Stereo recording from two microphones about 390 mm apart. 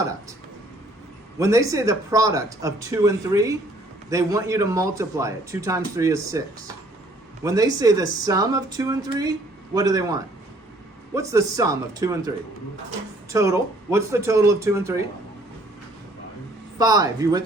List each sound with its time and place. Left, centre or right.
1.4 s speech: centre
7.4 s speech: centre
13.3 s speech: centre
16.7 s speech: centre